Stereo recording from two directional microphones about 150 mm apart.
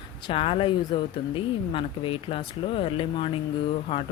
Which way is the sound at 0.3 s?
35° left (ahead or behind).